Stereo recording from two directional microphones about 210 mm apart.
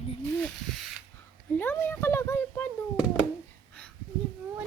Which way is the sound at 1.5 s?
10° left (ahead or behind).